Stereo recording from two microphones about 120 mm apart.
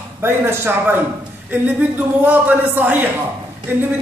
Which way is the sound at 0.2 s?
20° right (ahead or behind).